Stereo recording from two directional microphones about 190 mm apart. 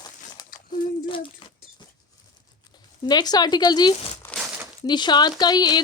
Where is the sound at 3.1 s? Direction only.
20° left (ahead or behind).